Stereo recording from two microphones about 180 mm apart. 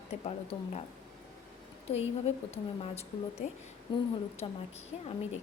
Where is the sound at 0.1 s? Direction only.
35° left (ahead or behind).